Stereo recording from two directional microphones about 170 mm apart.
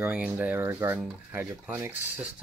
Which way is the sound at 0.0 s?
10° right (ahead or behind).